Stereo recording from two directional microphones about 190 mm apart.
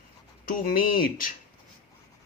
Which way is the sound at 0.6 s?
50° left (ahead or behind).